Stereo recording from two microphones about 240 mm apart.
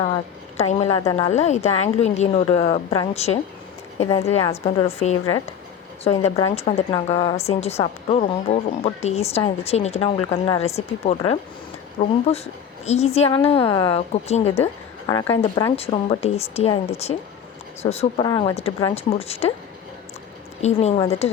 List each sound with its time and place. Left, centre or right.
0.0 s a woman's voice: left
12.8 s a woman's voice: left
14.6 s a sound: centre
15.3 s a woman's voice: centre
20.6 s a woman's voice: left